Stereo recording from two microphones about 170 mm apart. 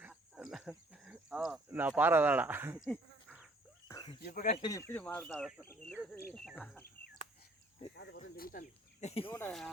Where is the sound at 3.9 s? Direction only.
25° left (ahead or behind).